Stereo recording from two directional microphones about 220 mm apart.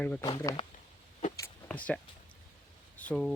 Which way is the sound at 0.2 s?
25° left (ahead or behind).